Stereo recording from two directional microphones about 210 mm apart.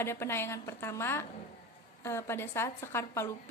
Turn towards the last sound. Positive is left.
turn(degrees=10)  # may be behind; listen again after turning